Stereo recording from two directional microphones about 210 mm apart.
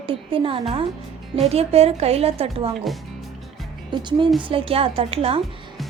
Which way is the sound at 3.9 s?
20° right (ahead or behind).